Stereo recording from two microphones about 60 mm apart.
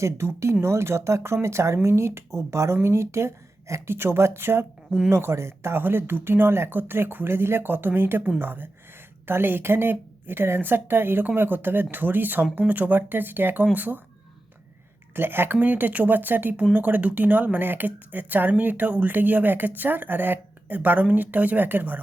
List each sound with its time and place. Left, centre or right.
0.0 s speech: right
15.1 s speech: right
15.6 s speech: right